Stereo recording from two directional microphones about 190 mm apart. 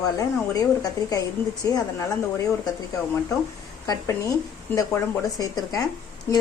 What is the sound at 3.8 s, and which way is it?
Speech, 20° left (ahead or behind).